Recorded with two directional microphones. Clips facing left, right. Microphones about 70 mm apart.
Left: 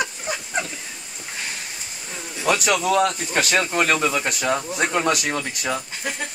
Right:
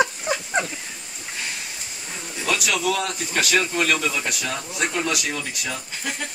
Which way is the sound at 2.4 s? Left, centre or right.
Left.